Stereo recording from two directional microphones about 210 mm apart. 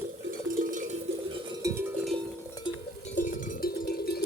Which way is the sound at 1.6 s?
10° right (ahead or behind).